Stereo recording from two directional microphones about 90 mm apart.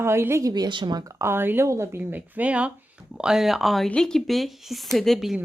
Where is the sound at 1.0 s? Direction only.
30° right (ahead or behind); by 5.4 s centre (ahead or behind).